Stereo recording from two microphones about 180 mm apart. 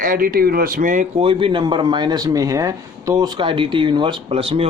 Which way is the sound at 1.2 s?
30° right (ahead or behind).